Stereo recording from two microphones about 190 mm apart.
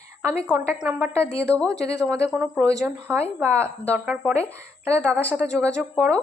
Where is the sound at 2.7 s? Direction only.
15° right (ahead or behind).